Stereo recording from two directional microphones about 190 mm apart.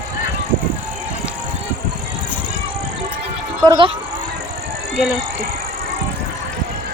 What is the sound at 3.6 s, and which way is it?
Speech, 20° right (ahead or behind).